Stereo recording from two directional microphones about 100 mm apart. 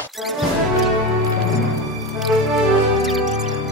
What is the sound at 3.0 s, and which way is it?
Music, 5° right (ahead or behind).